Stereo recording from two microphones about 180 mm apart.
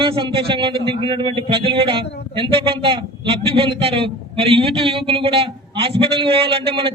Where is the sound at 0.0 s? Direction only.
30° right (ahead or behind).